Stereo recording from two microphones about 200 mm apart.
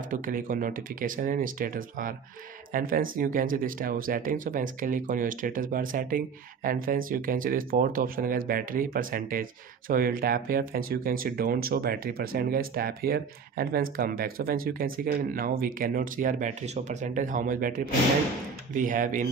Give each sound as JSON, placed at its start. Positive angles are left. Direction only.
{"t": 0.1, "sound": "speech", "side_deg": -45}